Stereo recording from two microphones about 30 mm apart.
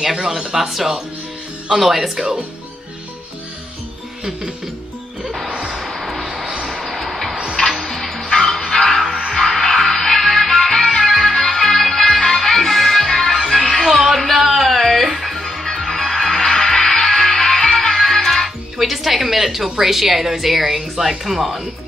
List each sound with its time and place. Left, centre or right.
0.2 s speech: right
0.6 s speech: centre
5.2 s speech: centre
5.7 s music: centre
18.8 s speech: centre